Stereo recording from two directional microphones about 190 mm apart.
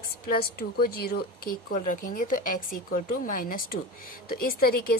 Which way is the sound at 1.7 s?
45° left (ahead or behind).